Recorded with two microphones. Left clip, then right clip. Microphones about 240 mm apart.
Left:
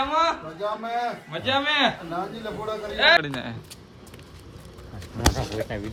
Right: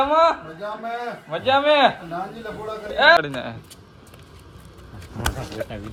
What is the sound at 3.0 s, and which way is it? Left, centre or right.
Speech, centre.